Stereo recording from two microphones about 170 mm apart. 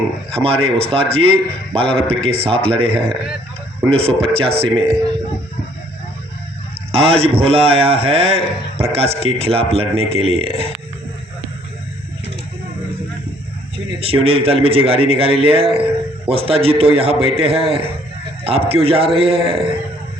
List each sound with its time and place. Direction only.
0.3 s a man's voice: 35° right (ahead or behind)
6.9 s a man's voice: 35° right (ahead or behind)
14.0 s a man's voice: 35° right (ahead or behind)